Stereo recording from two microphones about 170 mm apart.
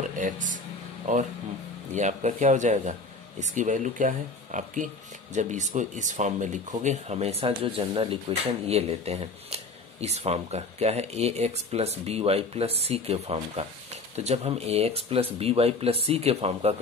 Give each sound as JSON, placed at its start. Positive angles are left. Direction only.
{"t": 0.2, "sound": "speech", "side_deg": -50}